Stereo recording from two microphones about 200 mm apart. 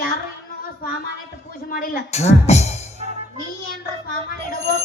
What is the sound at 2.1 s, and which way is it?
Speech, 35° left (ahead or behind).